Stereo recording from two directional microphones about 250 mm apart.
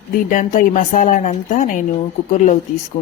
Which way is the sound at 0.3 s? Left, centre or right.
Left.